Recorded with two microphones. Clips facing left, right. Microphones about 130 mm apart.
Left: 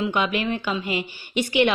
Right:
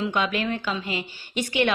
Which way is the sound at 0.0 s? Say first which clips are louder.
Left 2 dB; 10° left (ahead or behind).